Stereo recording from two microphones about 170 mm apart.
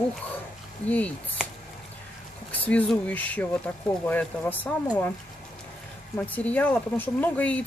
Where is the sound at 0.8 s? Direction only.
10° left (ahead or behind).